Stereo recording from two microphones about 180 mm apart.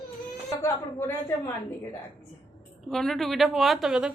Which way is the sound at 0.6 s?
15° left (ahead or behind).